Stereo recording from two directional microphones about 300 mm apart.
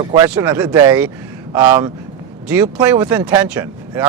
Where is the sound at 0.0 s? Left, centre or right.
Centre.